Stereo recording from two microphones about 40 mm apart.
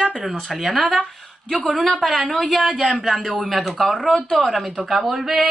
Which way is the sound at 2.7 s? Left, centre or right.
Centre.